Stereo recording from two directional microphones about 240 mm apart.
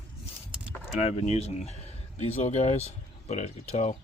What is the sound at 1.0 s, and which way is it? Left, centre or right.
Speech, left.